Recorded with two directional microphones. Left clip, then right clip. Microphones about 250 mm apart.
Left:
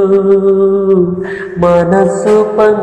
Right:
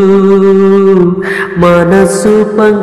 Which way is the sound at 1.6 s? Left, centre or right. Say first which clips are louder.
Right 2 dB; right.